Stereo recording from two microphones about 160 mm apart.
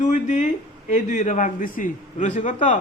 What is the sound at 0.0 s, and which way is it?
A man's voice, 50° left (ahead or behind).